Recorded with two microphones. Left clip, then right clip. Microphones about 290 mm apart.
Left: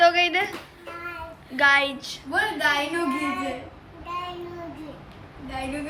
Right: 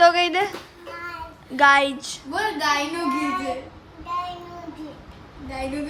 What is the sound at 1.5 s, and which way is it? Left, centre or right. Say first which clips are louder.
Speech: right 3 dB; centre.